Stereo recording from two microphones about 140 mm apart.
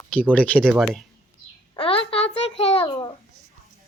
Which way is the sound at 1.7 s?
40° left (ahead or behind).